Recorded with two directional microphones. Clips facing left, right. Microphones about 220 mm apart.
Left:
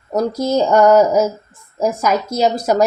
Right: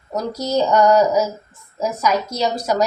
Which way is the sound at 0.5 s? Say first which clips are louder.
Left 3 dB; 55° left (ahead or behind).